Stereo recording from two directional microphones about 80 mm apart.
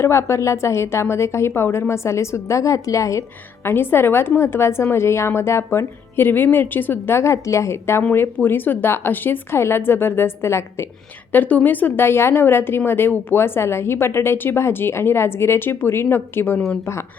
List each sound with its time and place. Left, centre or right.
0.0 s a woman's voice: left
7.2 s a woman's voice: left
11.3 s a woman's voice: left